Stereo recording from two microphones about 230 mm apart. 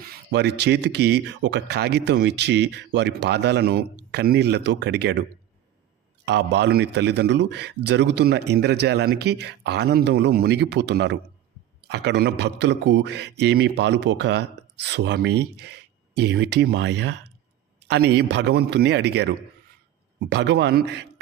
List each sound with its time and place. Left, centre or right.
0.3 s speech: right
6.2 s speech: right